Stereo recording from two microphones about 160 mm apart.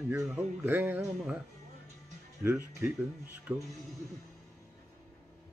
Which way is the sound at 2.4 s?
15° right (ahead or behind).